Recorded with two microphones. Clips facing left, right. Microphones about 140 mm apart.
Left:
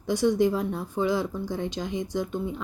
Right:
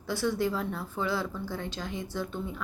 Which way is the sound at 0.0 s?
20° left (ahead or behind).